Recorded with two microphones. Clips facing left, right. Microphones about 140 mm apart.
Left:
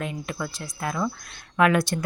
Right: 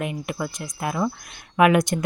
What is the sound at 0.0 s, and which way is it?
Speech, 15° right (ahead or behind).